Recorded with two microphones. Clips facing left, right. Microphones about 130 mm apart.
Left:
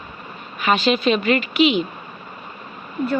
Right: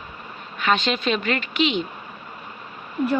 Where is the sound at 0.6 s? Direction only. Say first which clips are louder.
Left 4 dB; 5° left (ahead or behind).